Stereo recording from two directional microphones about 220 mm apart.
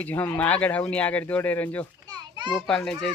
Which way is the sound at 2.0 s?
20° right (ahead or behind).